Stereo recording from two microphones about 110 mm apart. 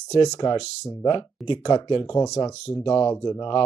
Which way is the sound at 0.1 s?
35° left (ahead or behind).